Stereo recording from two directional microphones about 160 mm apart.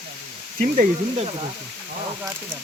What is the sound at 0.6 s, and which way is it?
Speech, 60° right (ahead or behind).